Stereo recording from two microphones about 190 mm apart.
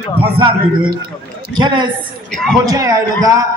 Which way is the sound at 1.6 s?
25° right (ahead or behind).